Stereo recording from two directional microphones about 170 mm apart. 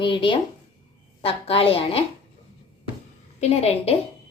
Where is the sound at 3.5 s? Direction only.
35° left (ahead or behind).